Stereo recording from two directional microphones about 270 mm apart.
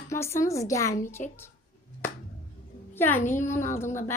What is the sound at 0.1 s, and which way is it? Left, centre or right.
A woman's voice, centre.